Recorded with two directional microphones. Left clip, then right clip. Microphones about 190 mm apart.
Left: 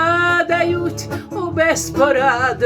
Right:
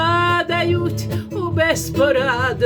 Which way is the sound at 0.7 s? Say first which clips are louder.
Left 1 dB; 15° right (ahead or behind).